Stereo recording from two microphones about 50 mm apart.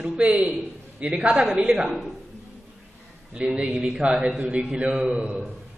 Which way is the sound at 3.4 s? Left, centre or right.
Right.